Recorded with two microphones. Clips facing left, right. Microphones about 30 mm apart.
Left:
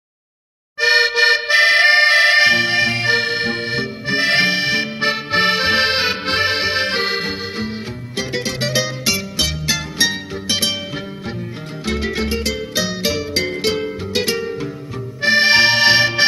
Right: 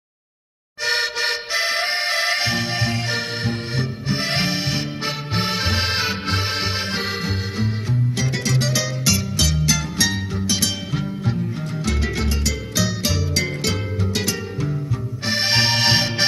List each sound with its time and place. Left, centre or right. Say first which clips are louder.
0.7 s accordion: left 8 dB; left
6.7 s music: left 6 dB; left
8.2 s music: left 5 dB; left
11.8 s music: left 4 dB; left
15.8 s accordion: left 6 dB; left